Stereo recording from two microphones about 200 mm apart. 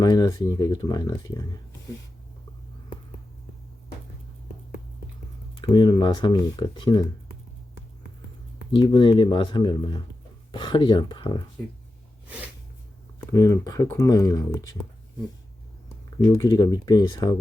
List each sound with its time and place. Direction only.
0.0 s speech: 20° left (ahead or behind)
5.5 s speech: 20° left (ahead or behind)
8.7 s speech: 25° left (ahead or behind)
13.3 s speech: 15° left (ahead or behind)
16.0 s speech: 20° left (ahead or behind)